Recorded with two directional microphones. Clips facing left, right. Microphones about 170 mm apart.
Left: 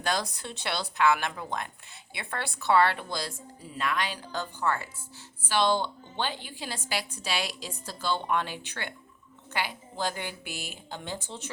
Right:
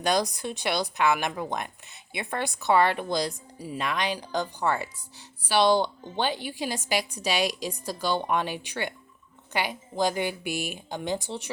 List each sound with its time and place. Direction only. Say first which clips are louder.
0.0 s a woman's voice: right 5 dB; 15° right (ahead or behind)